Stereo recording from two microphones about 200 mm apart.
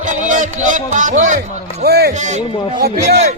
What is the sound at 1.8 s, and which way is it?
Speech, 55° right (ahead or behind).